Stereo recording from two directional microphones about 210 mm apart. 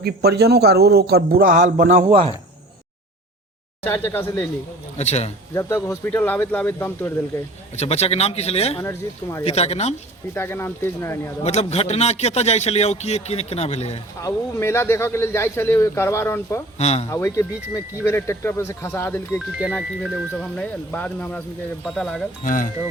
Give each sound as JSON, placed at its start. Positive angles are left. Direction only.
{"t": 0.0, "sound": "a man's voice", "side_deg": -50}
{"t": 4.0, "sound": "speech", "side_deg": 10}
{"t": 4.9, "sound": "a man's voice", "side_deg": 30}
{"t": 5.5, "sound": "speech", "side_deg": 15}
{"t": 7.8, "sound": "speech", "side_deg": 30}
{"t": 8.8, "sound": "speech", "side_deg": 15}
{"t": 9.4, "sound": "a man's voice", "side_deg": 30}
{"t": 10.3, "sound": "speech", "side_deg": 10}
{"t": 11.4, "sound": "a man's voice", "side_deg": 30}
{"t": 14.2, "sound": "speech", "side_deg": 15}
{"t": 16.7, "sound": "a man's voice", "side_deg": 30}
{"t": 17.1, "sound": "speech", "side_deg": 15}
{"t": 19.5, "sound": "speech", "side_deg": -5}
{"t": 22.4, "sound": "a man's voice", "side_deg": 40}